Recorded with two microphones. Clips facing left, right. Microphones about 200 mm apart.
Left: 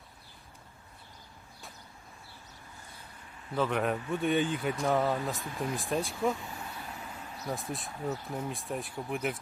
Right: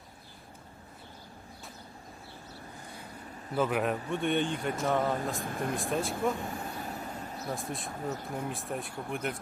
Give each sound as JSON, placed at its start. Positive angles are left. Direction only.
{"t": 3.5, "sound": "a man's voice", "side_deg": -5}
{"t": 5.4, "sound": "speech", "side_deg": -50}
{"t": 5.7, "sound": "a man's voice", "side_deg": 0}
{"t": 6.6, "sound": "vehicle", "side_deg": -40}
{"t": 7.5, "sound": "a man's voice", "side_deg": 0}
{"t": 7.9, "sound": "speech", "side_deg": -45}
{"t": 8.4, "sound": "a man's voice", "side_deg": 0}